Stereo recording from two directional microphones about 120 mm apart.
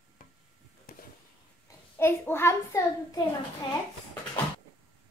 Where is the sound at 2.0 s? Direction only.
20° left (ahead or behind).